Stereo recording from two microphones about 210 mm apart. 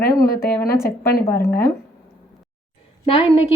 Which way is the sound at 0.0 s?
45° left (ahead or behind).